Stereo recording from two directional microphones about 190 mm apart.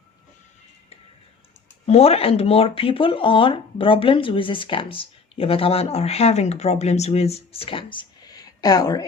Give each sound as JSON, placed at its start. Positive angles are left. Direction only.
{"t": 1.9, "sound": "speech", "side_deg": 35}